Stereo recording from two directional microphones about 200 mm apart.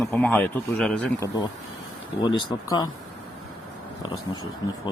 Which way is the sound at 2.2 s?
20° left (ahead or behind).